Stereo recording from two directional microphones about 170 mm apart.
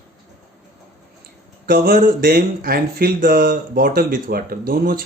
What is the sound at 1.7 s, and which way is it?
Speech, 60° right (ahead or behind).